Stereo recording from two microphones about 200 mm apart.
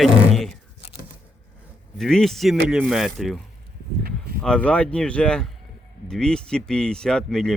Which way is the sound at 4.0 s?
45° right (ahead or behind).